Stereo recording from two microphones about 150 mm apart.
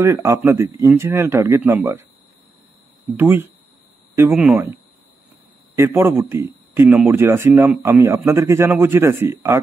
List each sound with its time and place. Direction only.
0.0 s a man's voice: 20° right (ahead or behind)
3.2 s a man's voice: 15° right (ahead or behind)
5.8 s a man's voice: 15° right (ahead or behind)
6.9 s speech: 5° right (ahead or behind)
7.2 s a man's voice: 15° right (ahead or behind)